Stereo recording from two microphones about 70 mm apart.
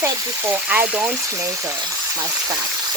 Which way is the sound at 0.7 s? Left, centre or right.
Right.